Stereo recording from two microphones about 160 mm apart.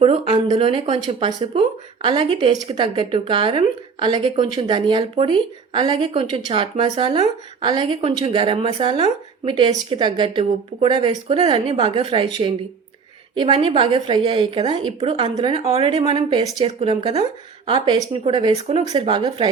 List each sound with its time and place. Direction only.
0.0 s speech: 35° right (ahead or behind)